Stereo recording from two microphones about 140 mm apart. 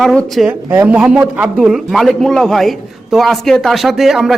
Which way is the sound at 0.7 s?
10° right (ahead or behind).